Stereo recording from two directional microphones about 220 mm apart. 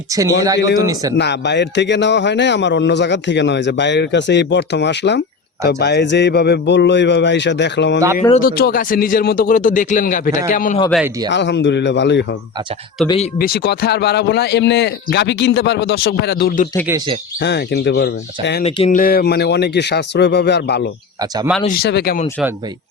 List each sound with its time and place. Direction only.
0.1 s speech: 15° right (ahead or behind)
1.2 s a man's voice: 50° left (ahead or behind)
11.3 s a man's voice: 55° left (ahead or behind)
13.1 s speech: 30° left (ahead or behind)
13.4 s a man's voice: 45° left (ahead or behind)
18.6 s a man's voice: 30° left (ahead or behind); by 20.9 s 50° left (ahead or behind)
21.2 s speech: 15° right (ahead or behind)
21.8 s a man's voice: 45° left (ahead or behind)